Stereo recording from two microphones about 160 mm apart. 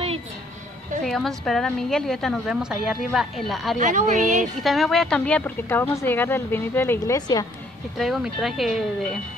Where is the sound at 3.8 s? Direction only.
50° right (ahead or behind).